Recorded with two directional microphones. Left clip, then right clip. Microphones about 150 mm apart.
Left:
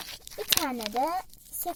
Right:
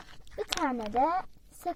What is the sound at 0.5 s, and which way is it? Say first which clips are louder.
Speech: left 2 dB; 10° left (ahead or behind).